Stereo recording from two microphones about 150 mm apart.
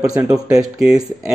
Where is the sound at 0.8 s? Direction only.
5° right (ahead or behind).